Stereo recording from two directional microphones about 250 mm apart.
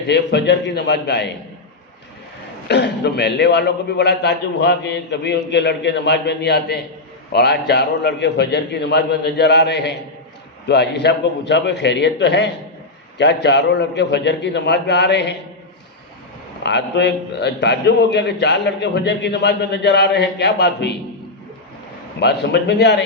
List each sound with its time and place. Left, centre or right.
0.1 s a man's voice: left
2.6 s a man's voice: left
16.6 s a man's voice: left
22.2 s a man's voice: left